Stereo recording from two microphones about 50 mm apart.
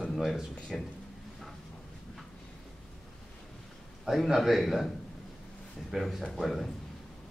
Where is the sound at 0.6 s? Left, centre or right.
Centre.